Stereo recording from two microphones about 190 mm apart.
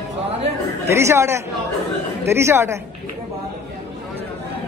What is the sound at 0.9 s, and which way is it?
Speech, 15° right (ahead or behind).